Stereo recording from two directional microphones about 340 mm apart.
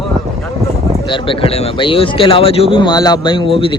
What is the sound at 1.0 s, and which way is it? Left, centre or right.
A man's voice, centre.